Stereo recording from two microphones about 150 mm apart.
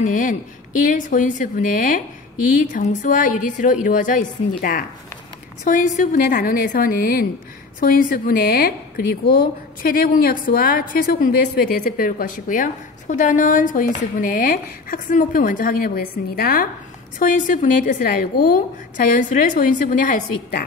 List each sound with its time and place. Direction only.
0.0 s a woman's voice: 60° left (ahead or behind)
5.6 s a woman's voice: 55° left (ahead or behind); by 16.6 s 80° left
17.2 s a woman's voice: 60° left (ahead or behind)